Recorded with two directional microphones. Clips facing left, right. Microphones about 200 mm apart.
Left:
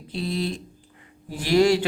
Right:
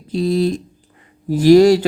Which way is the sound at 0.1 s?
40° right (ahead or behind).